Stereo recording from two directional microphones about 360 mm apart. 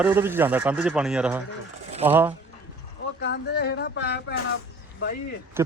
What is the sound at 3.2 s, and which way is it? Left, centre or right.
Speech, left.